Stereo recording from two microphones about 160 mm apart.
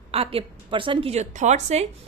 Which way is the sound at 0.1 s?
35° right (ahead or behind).